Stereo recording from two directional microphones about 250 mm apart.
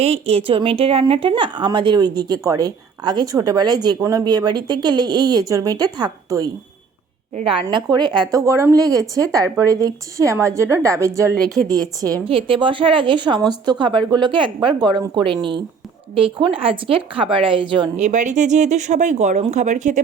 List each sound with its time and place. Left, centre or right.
0.0 s a woman's voice: right